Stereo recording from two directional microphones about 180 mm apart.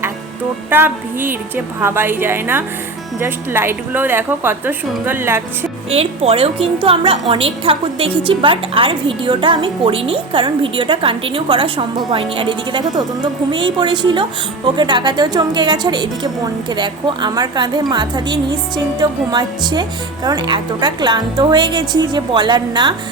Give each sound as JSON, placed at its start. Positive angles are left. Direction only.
{"t": 0.7, "sound": "a woman's voice", "side_deg": -10}
{"t": 5.9, "sound": "a woman's voice", "side_deg": -30}